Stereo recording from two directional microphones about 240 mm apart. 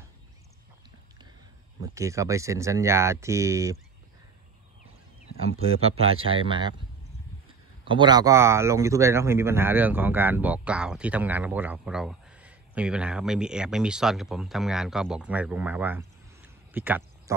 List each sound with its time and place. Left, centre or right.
1.8 s speech: centre
5.8 s speech: right
7.8 s speech: centre